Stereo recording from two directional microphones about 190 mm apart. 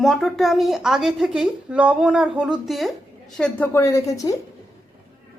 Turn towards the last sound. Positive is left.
turn(degrees=15)  # may be behind; listen again after turning